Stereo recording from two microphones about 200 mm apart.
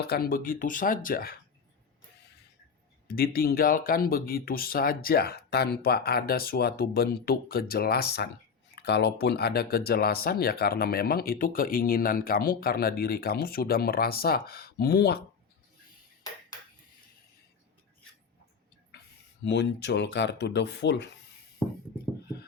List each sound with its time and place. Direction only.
0.0 s speech: 50° left (ahead or behind)
3.1 s speech: 50° left (ahead or behind)
19.5 s speech: 60° left (ahead or behind)